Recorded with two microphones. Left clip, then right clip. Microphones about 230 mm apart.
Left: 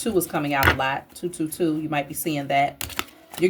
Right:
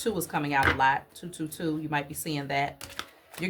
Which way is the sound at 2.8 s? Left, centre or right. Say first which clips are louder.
Left 9 dB; left.